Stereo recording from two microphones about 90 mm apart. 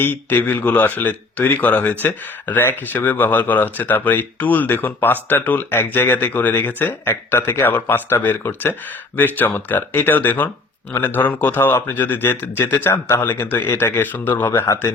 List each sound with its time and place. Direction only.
0.0 s speech: 20° left (ahead or behind)